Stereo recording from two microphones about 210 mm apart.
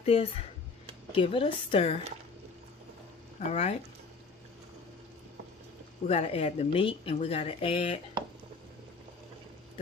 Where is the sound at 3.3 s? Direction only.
30° left (ahead or behind).